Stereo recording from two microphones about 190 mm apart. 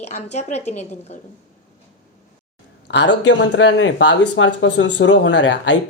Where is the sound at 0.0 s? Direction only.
35° left (ahead or behind).